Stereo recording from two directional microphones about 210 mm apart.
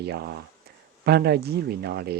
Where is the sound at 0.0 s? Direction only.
50° right (ahead or behind).